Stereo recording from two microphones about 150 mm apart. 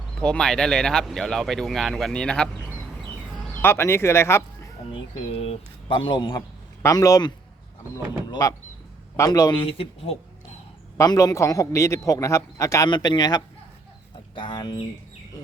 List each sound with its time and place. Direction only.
0.2 s speech: 5° left (ahead or behind)
3.5 s speech: 15° left (ahead or behind)
4.9 s a man's voice: 40° left (ahead or behind)
10.9 s a man's voice: 25° left (ahead or behind)